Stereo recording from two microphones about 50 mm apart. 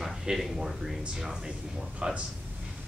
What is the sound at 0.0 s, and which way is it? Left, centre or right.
Speech, centre.